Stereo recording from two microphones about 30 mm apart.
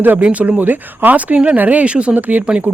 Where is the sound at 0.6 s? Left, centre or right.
Right.